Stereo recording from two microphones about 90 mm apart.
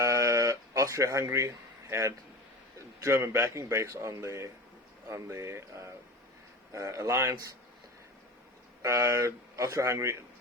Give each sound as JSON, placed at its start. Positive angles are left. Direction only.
{"t": 0.0, "sound": "music", "side_deg": -35}
{"t": 3.0, "sound": "a man's voice", "side_deg": -30}
{"t": 8.8, "sound": "a man's voice", "side_deg": -35}